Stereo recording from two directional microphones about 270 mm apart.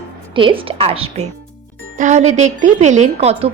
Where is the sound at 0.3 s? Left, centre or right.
Centre.